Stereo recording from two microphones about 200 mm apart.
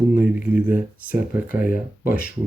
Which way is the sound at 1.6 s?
45° left (ahead or behind).